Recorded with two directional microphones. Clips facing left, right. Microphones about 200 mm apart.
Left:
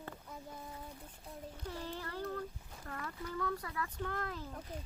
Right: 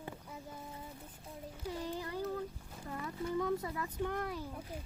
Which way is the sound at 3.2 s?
20° right (ahead or behind).